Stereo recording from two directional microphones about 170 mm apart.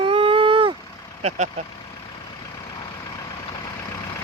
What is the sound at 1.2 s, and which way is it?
Speech, 40° right (ahead or behind).